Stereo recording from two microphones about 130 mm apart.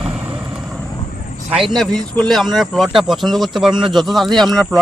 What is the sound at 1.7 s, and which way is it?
Speech, 5° left (ahead or behind).